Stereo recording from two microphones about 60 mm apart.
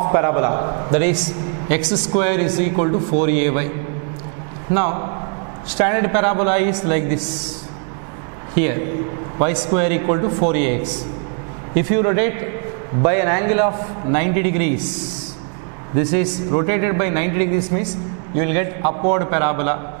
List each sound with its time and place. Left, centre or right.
0.0 s a man's voice: right
4.7 s a man's voice: right
8.5 s a man's voice: centre
16.0 s a man's voice: centre